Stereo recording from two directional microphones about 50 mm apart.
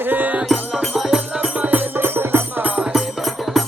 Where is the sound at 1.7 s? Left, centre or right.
Right.